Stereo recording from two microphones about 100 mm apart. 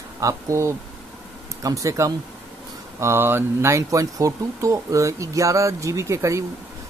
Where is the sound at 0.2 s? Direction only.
30° right (ahead or behind).